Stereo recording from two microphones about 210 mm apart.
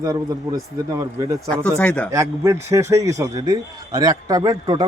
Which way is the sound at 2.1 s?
15° right (ahead or behind).